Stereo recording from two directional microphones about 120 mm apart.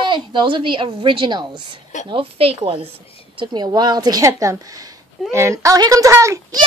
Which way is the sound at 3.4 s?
35° right (ahead or behind).